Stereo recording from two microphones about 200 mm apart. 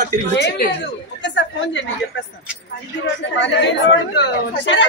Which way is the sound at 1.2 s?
65° left (ahead or behind).